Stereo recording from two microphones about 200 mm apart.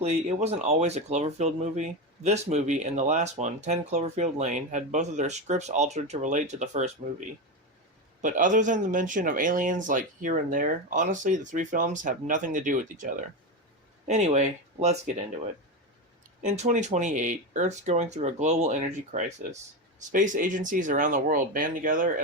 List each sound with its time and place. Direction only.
0.0 s speech: 35° right (ahead or behind)
8.2 s speech: 40° right (ahead or behind)
14.1 s speech: 35° right (ahead or behind)
16.4 s speech: 35° right (ahead or behind)